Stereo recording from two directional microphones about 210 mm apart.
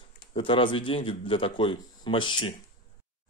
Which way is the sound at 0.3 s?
25° left (ahead or behind).